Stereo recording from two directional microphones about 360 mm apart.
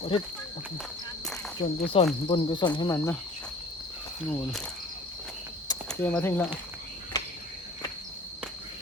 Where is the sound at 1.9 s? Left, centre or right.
Centre.